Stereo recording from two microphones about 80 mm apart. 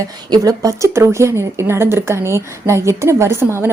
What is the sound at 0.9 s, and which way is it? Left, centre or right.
A woman's voice, right.